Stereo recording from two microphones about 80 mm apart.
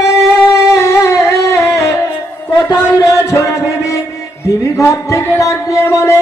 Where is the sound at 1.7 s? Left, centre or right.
Left.